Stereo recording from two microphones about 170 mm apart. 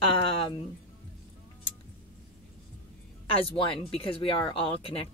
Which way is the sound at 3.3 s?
35° left (ahead or behind).